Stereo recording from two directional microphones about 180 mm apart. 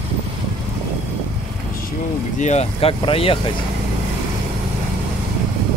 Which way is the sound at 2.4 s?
40° left (ahead or behind).